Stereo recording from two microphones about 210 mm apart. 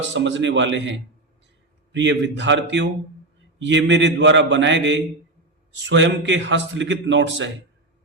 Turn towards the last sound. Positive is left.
turn(degrees=-55)  # may be behind; listen again after turning